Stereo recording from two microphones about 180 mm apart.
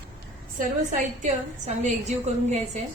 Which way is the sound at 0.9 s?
40° right (ahead or behind).